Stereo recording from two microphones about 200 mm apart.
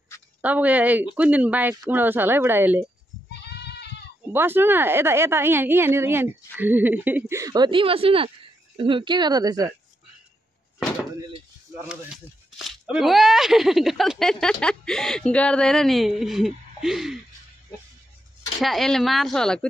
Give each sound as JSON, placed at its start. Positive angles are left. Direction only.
{"t": 0.4, "sound": "a woman's voice", "side_deg": -5}
{"t": 4.3, "sound": "a woman's voice", "side_deg": -10}
{"t": 11.9, "sound": "speech", "side_deg": 0}
{"t": 18.6, "sound": "speech", "side_deg": 0}